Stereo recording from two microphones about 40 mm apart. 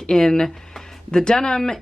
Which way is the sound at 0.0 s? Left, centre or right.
Centre.